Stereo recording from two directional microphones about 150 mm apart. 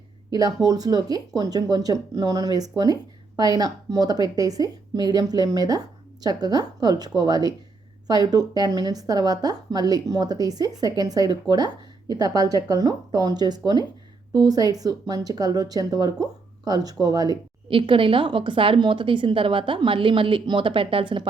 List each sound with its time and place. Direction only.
0.3 s a woman's voice: 25° right (ahead or behind)